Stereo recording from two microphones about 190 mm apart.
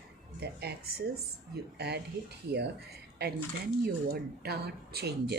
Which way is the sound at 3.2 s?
55° right (ahead or behind).